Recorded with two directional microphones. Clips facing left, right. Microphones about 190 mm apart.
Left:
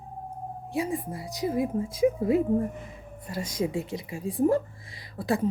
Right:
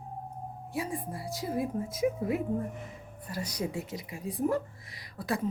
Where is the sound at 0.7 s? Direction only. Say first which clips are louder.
Left 5 dB; 25° left (ahead or behind).